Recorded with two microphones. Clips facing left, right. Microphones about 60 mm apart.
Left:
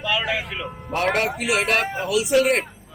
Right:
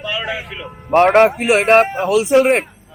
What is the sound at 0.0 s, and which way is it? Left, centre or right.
Speech, centre.